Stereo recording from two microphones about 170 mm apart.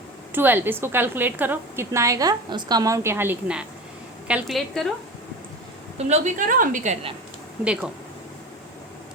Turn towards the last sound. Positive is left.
turn(degrees=-5)  # may be behind; listen again after turning